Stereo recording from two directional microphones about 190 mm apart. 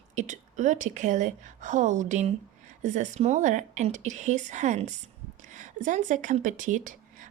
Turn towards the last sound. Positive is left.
turn(degrees=-45)  # may be behind; listen again after turning